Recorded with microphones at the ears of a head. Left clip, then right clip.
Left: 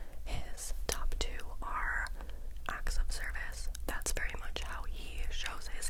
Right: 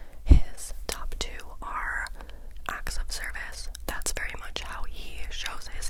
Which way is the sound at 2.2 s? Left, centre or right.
Right.